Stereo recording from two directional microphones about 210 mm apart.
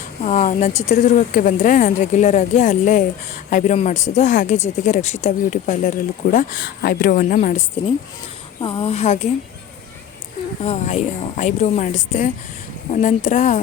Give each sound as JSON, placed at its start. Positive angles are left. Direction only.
{"t": 0.2, "sound": "speech", "side_deg": 35}
{"t": 8.6, "sound": "a woman's voice", "side_deg": 25}
{"t": 10.6, "sound": "speech", "side_deg": 30}